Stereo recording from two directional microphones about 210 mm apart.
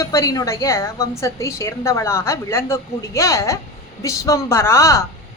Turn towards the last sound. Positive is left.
turn(degrees=15)  # may be behind; listen again after turning